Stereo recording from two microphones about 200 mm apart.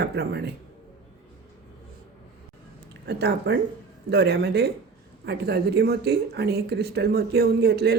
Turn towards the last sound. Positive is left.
turn(degrees=-55)  # may be behind; listen again after turning